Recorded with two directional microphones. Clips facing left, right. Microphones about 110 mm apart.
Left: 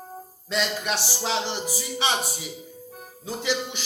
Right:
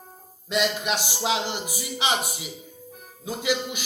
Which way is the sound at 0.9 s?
15° right (ahead or behind).